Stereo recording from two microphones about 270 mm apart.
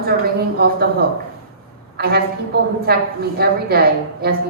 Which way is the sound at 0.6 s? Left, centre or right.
Right.